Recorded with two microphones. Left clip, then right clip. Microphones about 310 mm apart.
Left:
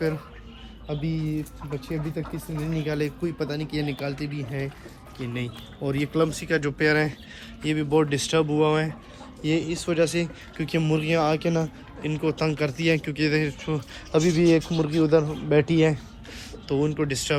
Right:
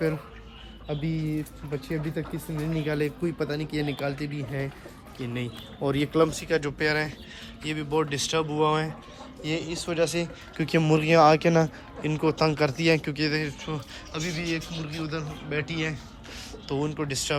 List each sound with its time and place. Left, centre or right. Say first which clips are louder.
0.9 s speech: left 1 dB; centre
5.8 s speech: right 1 dB; right
6.3 s speech: left 1 dB; centre
10.7 s speech: right 3 dB; right